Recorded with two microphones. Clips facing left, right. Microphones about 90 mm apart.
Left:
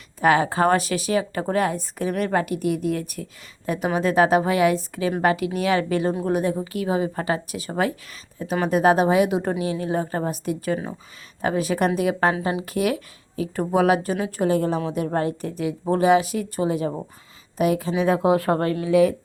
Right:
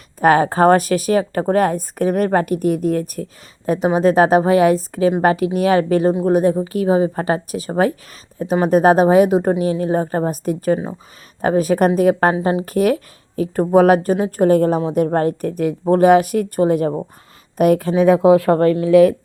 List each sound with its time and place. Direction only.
0.2 s a woman's voice: 45° right (ahead or behind)